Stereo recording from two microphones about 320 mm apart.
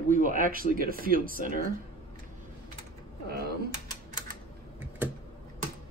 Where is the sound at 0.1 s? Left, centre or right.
Right.